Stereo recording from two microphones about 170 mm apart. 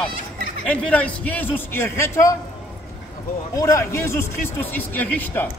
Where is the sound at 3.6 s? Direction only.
20° left (ahead or behind).